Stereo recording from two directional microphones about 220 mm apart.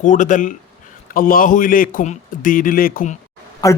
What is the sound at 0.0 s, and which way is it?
A man's voice, 35° left (ahead or behind).